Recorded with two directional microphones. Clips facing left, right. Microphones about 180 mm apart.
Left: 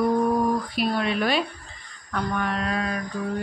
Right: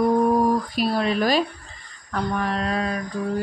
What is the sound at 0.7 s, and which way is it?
Speech, 40° right (ahead or behind).